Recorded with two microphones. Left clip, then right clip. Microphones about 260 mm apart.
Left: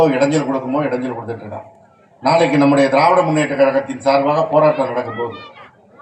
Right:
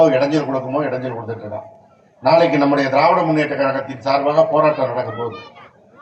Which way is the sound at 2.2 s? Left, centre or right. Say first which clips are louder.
Even; left.